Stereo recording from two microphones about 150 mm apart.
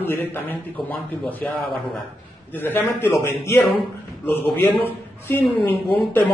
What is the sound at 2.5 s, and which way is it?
A woman's voice, 15° left (ahead or behind).